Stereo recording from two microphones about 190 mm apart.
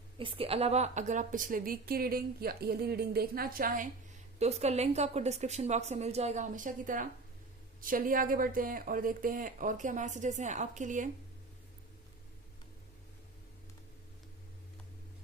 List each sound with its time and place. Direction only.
0.2 s a woman's voice: 30° right (ahead or behind); by 3.8 s 50° right (ahead or behind)
4.4 s a woman's voice: 35° right (ahead or behind)